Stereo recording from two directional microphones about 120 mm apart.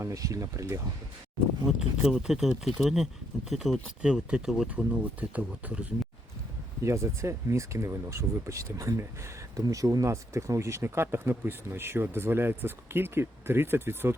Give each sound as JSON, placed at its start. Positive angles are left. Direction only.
{"t": 0.0, "sound": "speech", "side_deg": -25}
{"t": 2.0, "sound": "speech", "side_deg": -5}
{"t": 6.8, "sound": "speech", "side_deg": -25}